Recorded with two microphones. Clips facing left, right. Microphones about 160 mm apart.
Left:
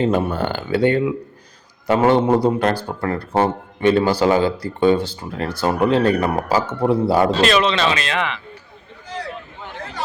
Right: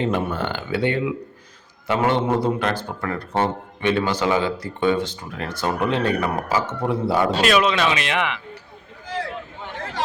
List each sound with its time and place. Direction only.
0.0 s speech: 40° left (ahead or behind)
7.4 s speech: 10° right (ahead or behind)